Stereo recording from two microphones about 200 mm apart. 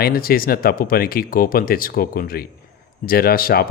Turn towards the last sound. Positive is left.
turn(degrees=50)  # may be behind; listen again after turning